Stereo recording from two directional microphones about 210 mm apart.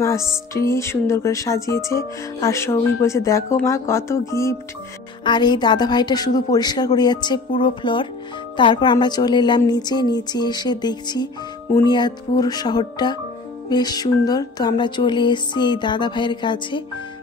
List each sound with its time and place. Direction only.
0.0 s music: 15° left (ahead or behind)
5.2 s speech: 20° left (ahead or behind)